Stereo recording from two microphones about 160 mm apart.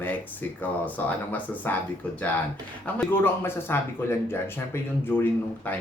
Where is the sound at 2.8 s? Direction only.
10° left (ahead or behind).